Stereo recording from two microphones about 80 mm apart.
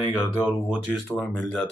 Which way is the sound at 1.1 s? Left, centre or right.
Centre.